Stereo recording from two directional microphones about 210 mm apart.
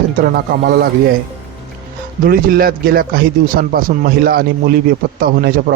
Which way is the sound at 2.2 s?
45° right (ahead or behind).